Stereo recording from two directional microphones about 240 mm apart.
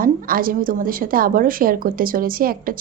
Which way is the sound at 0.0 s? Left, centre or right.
Right.